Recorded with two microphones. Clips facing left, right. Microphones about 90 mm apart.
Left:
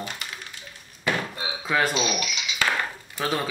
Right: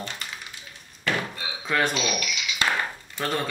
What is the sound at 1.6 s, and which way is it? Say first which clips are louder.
Speech: left 1 dB; 5° left (ahead or behind).